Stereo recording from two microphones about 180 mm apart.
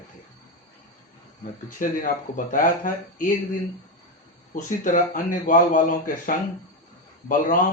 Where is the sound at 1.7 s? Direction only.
50° left (ahead or behind).